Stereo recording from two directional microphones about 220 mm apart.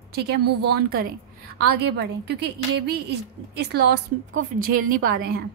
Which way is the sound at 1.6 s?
50° right (ahead or behind).